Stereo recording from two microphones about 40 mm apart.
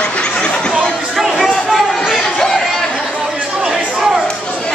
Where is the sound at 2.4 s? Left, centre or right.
Centre.